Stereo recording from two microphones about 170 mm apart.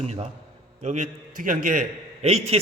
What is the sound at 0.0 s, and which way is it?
A man's voice, 35° right (ahead or behind).